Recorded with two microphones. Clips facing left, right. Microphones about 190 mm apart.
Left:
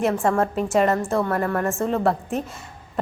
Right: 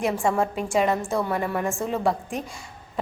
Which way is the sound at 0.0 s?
Centre (ahead or behind).